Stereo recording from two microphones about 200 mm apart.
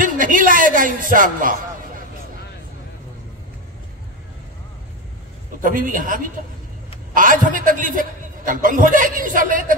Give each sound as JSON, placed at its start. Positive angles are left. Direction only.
{"t": 0.0, "sound": "music", "side_deg": -40}
{"t": 5.6, "sound": "a man's voice", "side_deg": -40}